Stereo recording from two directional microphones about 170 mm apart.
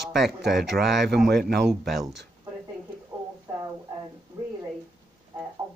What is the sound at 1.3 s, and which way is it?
Speech, 70° right (ahead or behind).